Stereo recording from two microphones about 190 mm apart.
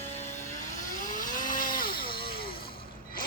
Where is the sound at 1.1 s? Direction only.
45° left (ahead or behind).